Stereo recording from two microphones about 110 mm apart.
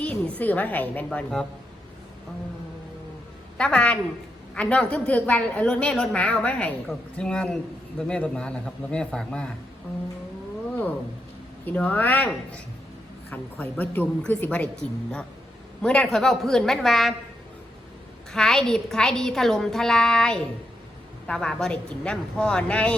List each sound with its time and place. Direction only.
0.0 s a man's voice: 15° left (ahead or behind)
3.6 s a man's voice: 10° left (ahead or behind)
11.6 s a man's voice: 15° left (ahead or behind)
18.3 s a woman's voice: 5° left (ahead or behind)